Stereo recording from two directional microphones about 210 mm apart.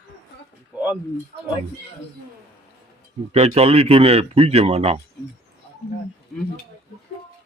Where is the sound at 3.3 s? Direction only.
30° right (ahead or behind).